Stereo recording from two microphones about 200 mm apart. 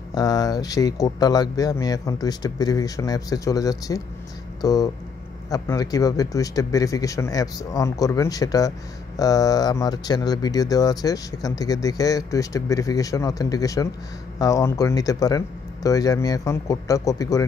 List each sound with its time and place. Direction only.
0.1 s speech: 20° left (ahead or behind)